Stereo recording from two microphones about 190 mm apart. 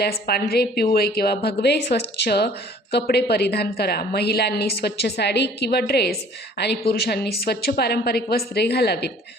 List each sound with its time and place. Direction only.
0.0 s a woman's voice: 55° left (ahead or behind)